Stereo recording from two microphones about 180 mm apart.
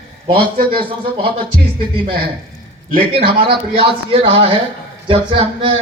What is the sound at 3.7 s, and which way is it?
Speech, 30° right (ahead or behind).